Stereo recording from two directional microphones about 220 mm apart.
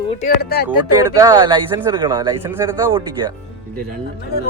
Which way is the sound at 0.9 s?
15° right (ahead or behind).